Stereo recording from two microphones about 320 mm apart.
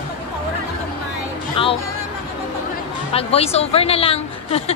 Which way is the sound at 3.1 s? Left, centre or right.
Centre.